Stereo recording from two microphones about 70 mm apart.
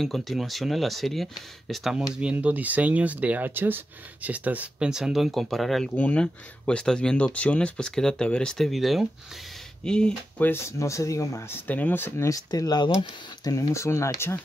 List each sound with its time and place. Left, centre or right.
0.0 s speech: centre
2.0 s speech: centre
5.9 s speech: centre
9.8 s speech: centre
10.4 s speech: left
10.8 s speech: left
11.5 s speech: left
12.2 s speech: left
12.4 s speech: left
13.4 s speech: left